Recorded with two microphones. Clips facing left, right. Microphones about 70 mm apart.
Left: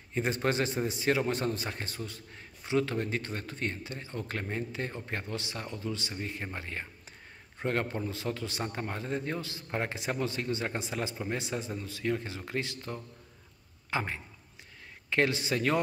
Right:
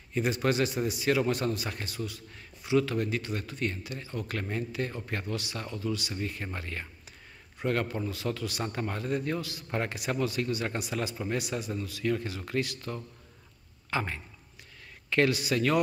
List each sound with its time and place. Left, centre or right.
0.1 s a man's voice: left